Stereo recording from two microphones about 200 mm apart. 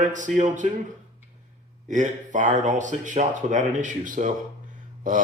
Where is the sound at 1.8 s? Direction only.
40° right (ahead or behind).